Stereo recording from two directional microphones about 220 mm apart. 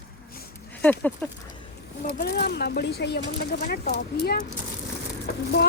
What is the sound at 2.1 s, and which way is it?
Speech, 50° left (ahead or behind).